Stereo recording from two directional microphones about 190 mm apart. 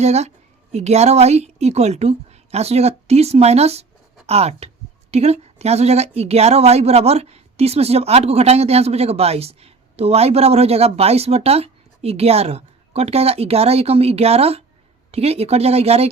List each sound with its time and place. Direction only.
0.0 s a woman's voice: 35° right (ahead or behind)